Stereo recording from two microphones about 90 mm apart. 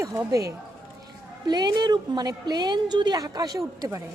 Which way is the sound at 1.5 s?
50° right (ahead or behind).